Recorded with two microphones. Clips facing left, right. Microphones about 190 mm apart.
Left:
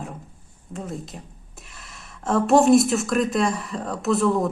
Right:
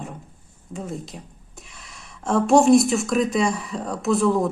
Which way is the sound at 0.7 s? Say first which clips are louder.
Right 1 dB; centre (ahead or behind).